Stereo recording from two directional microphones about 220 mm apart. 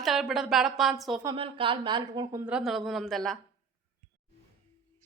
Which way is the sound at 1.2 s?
20° right (ahead or behind).